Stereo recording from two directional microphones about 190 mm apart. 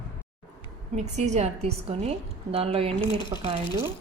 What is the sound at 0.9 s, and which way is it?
Speech, 35° right (ahead or behind).